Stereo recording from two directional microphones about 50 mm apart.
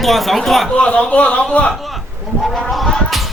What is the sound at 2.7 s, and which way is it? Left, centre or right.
Whip, centre.